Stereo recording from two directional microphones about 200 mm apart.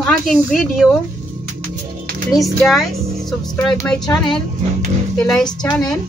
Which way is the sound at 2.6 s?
Centre (ahead or behind).